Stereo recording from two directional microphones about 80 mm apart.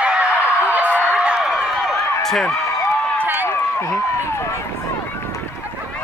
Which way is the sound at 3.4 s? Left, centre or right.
Left.